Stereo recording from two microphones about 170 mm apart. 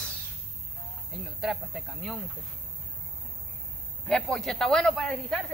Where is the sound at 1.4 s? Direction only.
Centre (ahead or behind).